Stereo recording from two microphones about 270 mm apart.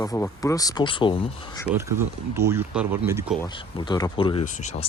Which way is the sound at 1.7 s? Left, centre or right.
Centre.